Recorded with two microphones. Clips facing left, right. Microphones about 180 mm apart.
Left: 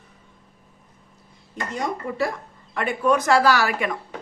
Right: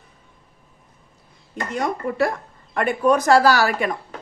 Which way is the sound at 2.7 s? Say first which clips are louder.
Right 3 dB; 45° right (ahead or behind).